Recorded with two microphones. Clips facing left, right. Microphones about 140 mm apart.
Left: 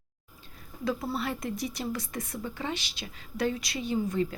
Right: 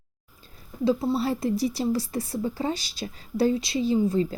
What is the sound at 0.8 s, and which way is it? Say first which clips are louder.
A woman's voice: right 8 dB; 30° right (ahead or behind).